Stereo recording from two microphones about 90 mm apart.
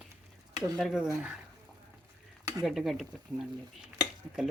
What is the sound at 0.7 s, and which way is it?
Speech, 5° right (ahead or behind).